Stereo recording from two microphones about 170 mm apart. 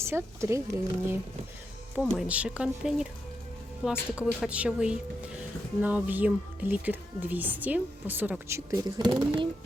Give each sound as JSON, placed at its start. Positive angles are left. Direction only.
{"t": 0.0, "sound": "speech", "side_deg": -15}
{"t": 2.0, "sound": "speech", "side_deg": -5}